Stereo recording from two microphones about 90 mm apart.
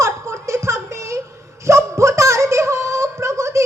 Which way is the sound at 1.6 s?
35° right (ahead or behind).